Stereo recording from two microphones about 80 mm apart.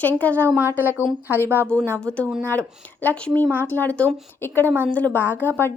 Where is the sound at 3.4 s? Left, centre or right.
Right.